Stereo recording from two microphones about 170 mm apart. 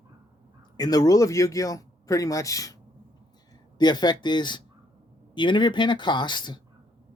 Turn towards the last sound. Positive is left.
turn(degrees=25)  # may be behind; listen again after turning